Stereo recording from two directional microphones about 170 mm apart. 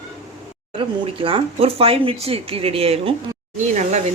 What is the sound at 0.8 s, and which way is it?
Speech, 30° right (ahead or behind).